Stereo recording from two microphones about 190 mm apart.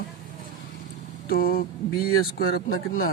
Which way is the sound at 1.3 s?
50° left (ahead or behind).